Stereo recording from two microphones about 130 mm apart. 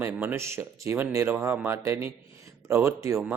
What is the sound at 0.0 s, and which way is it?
Speech, 15° right (ahead or behind).